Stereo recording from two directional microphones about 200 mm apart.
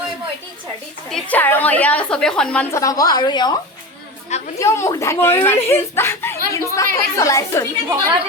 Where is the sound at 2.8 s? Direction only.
20° left (ahead or behind).